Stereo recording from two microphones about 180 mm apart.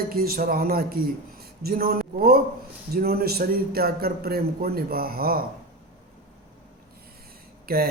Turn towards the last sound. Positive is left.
turn(degrees=-55)  # may be behind; listen again after turning